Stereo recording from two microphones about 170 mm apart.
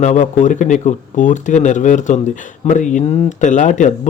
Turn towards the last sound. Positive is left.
turn(degrees=45)  # may be behind; listen again after turning